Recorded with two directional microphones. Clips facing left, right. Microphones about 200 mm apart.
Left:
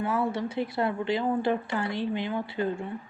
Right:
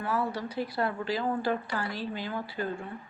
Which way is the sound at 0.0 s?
25° left (ahead or behind).